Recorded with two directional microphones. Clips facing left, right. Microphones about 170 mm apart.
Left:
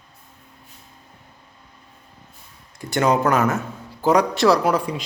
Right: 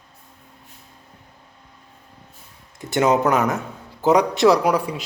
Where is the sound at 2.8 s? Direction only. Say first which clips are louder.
Right 1 dB; 20° right (ahead or behind).